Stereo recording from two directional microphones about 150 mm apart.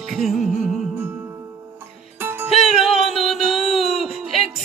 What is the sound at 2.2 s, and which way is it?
Music, 15° right (ahead or behind).